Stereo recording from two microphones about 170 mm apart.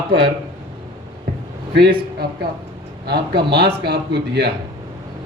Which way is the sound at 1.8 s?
65° right (ahead or behind).